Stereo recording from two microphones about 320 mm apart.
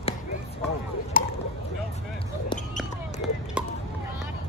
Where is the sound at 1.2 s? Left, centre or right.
Left.